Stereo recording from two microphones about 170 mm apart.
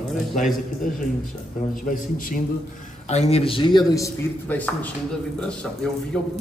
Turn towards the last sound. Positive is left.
turn(degrees=15)  # may be behind; listen again after turning